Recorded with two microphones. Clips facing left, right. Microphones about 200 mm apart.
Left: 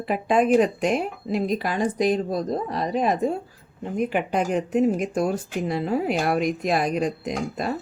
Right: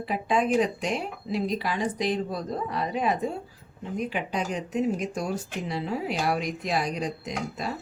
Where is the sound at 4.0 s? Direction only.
55° left (ahead or behind).